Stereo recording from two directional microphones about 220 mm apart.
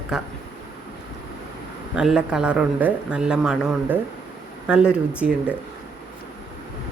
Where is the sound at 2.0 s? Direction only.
Centre (ahead or behind).